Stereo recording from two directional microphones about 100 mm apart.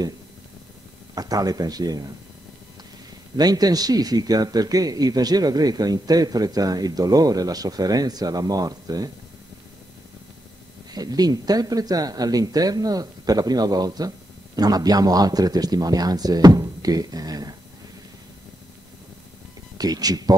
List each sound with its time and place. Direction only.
1.1 s speech: 40° right (ahead or behind)
3.3 s speech: 40° right (ahead or behind)
10.9 s speech: 40° right (ahead or behind)
19.8 s speech: 40° right (ahead or behind)